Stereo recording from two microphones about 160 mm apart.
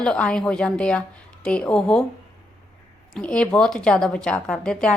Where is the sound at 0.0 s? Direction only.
5° left (ahead or behind).